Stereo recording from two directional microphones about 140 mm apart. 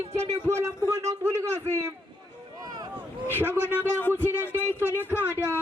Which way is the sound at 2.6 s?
30° right (ahead or behind).